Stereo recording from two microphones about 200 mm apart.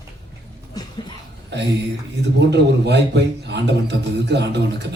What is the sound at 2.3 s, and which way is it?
A man's voice, 60° right (ahead or behind).